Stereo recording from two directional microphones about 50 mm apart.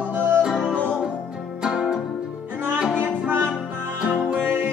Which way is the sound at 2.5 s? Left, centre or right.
Right.